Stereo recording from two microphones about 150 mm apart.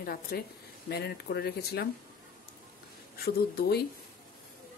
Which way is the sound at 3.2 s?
90° left.